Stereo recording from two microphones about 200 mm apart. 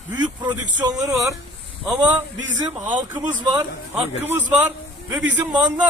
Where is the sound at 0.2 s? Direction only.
20° right (ahead or behind).